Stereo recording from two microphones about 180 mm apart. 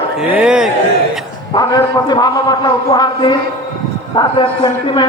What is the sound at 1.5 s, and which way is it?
A man's voice, 20° left (ahead or behind).